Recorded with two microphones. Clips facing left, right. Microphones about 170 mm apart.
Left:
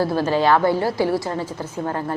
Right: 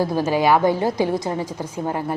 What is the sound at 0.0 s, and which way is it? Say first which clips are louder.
A woman's voice: even; 15° right (ahead or behind).